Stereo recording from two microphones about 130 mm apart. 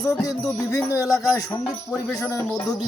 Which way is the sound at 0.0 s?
25° left (ahead or behind).